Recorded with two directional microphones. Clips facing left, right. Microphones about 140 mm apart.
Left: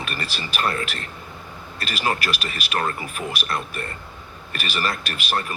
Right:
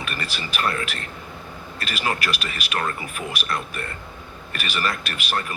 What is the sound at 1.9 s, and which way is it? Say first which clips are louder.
Speech: left 1 dB; 35° left (ahead or behind).